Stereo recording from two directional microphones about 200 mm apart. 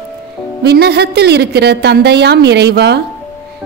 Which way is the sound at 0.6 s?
55° right (ahead or behind).